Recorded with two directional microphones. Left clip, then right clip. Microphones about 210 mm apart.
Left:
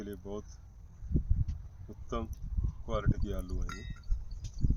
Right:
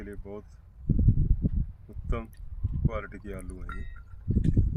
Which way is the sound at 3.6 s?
55° left (ahead or behind).